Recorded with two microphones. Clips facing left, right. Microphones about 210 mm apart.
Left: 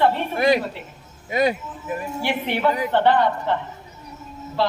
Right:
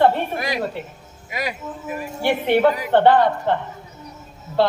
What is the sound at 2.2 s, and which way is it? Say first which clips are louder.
Speech: right 7 dB; 55° right (ahead or behind).